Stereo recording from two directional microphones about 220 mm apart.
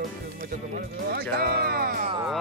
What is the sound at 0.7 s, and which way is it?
Speech, 45° right (ahead or behind).